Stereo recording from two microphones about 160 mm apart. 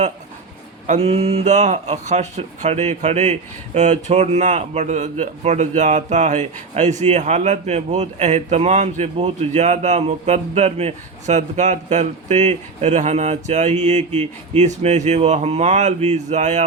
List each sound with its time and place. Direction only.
0.9 s a man's voice: 40° right (ahead or behind)